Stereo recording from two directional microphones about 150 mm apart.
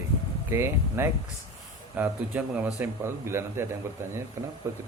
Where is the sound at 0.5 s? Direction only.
15° right (ahead or behind).